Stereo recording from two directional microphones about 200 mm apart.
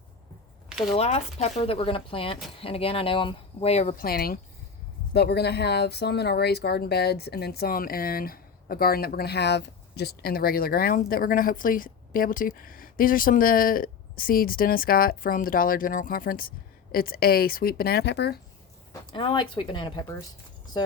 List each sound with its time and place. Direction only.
0.9 s speech: 30° left (ahead or behind); by 18.3 s 55° left (ahead or behind)
19.1 s speech: 25° left (ahead or behind)